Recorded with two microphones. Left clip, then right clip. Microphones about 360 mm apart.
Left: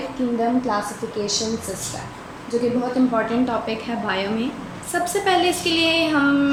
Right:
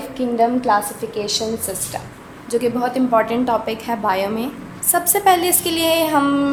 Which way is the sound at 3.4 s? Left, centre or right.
Centre.